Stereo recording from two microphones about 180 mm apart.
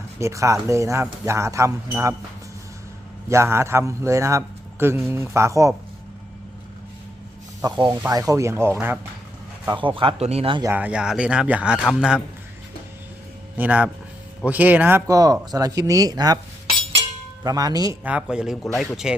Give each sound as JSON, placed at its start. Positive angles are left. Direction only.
{"t": 0.2, "sound": "a man's voice", "side_deg": -15}
{"t": 3.2, "sound": "a man's voice", "side_deg": -15}
{"t": 7.6, "sound": "a man's voice", "side_deg": -20}
{"t": 9.6, "sound": "speech", "side_deg": -25}
{"t": 10.6, "sound": "a man's voice", "side_deg": -10}
{"t": 13.6, "sound": "a man's voice", "side_deg": -10}
{"t": 17.4, "sound": "speech", "side_deg": -20}
{"t": 18.0, "sound": "a man's voice", "side_deg": -5}